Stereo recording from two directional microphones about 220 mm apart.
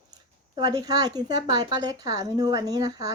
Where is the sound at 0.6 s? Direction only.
15° right (ahead or behind).